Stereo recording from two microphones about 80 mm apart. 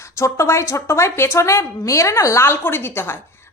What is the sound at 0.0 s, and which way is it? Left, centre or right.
Speech, left.